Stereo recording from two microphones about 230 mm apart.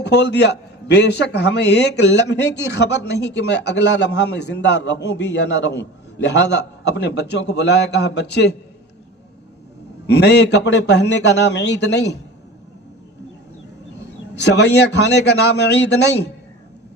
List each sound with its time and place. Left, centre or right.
0.0 s a man's voice: left
10.1 s a man's voice: left
14.3 s a man's voice: left